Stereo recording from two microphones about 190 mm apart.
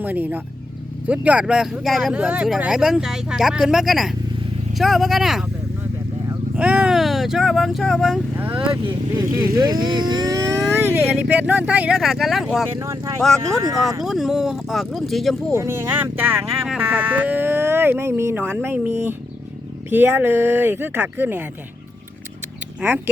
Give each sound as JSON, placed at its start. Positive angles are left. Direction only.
{"t": 0.0, "sound": "speech", "side_deg": -10}
{"t": 6.6, "sound": "speech", "side_deg": -5}
{"t": 9.2, "sound": "speech", "side_deg": -50}
{"t": 9.6, "sound": "speech", "side_deg": -20}
{"t": 10.8, "sound": "speech", "side_deg": -10}
{"t": 13.5, "sound": "speech", "side_deg": -20}
{"t": 14.0, "sound": "speech", "side_deg": 0}
{"t": 15.5, "sound": "speech", "side_deg": -15}